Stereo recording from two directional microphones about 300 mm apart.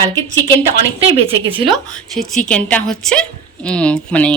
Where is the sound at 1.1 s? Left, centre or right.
Centre.